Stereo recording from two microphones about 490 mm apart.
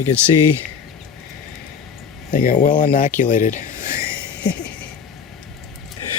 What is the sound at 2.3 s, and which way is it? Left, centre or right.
Speech, centre.